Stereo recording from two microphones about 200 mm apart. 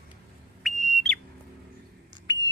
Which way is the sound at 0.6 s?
Centre (ahead or behind).